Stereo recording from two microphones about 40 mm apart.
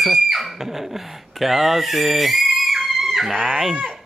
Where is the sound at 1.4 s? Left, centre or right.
Centre.